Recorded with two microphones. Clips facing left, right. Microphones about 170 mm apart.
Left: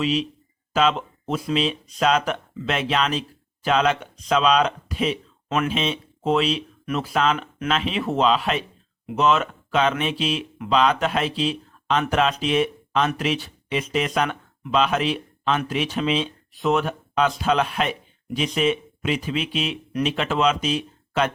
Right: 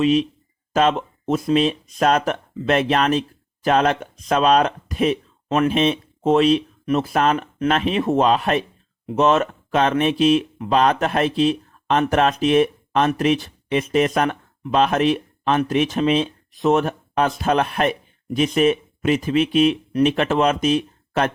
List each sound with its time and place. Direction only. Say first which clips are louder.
0.8 s speech: right 3 dB; 45° right (ahead or behind)